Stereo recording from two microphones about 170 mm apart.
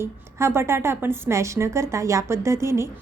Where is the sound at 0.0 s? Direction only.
15° right (ahead or behind).